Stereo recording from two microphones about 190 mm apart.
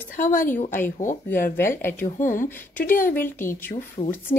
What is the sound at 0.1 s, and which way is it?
Speech, 45° left (ahead or behind).